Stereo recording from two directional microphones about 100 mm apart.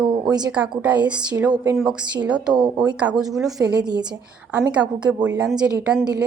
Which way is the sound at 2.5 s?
50° right (ahead or behind).